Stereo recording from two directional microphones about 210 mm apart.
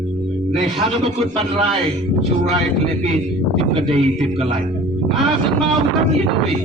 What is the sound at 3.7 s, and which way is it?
Speech, 30° right (ahead or behind).